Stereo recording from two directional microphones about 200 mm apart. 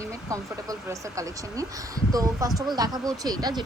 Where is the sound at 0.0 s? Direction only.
15° right (ahead or behind).